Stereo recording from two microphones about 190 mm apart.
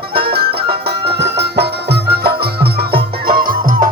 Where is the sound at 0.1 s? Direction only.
55° right (ahead or behind).